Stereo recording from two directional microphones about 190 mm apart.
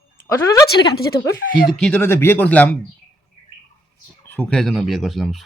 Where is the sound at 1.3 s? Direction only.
50° left (ahead or behind).